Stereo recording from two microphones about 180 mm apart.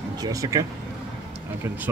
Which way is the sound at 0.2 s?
20° right (ahead or behind).